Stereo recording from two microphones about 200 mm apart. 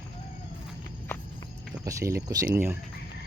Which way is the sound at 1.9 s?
15° right (ahead or behind).